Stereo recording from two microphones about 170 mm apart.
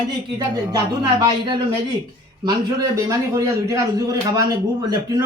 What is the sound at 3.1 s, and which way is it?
A man's voice, 20° right (ahead or behind).